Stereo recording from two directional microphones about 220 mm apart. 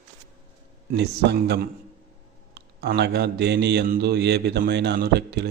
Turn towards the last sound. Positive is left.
turn(degrees=-45)  # may be behind; listen again after turning